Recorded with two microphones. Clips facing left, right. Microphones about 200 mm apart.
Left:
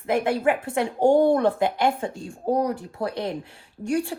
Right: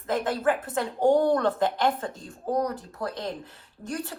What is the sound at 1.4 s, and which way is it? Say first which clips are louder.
Speech: left 3 dB; 10° left (ahead or behind).